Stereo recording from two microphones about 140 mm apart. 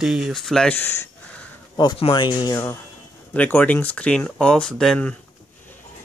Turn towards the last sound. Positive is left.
turn(degrees=5)  # may be behind; listen again after turning